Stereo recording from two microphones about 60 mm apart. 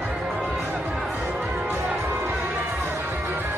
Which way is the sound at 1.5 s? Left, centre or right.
Right.